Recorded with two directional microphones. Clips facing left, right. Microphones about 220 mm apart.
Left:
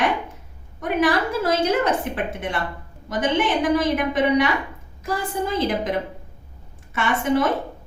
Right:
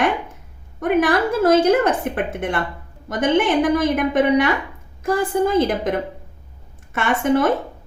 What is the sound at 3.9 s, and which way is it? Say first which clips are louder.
A woman's voice: right 3 dB; 50° right (ahead or behind).